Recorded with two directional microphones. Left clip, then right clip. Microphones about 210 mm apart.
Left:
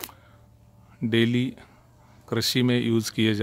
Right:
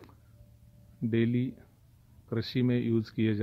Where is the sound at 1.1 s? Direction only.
15° left (ahead or behind).